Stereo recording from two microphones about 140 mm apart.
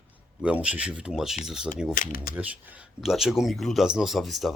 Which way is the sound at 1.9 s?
80° left.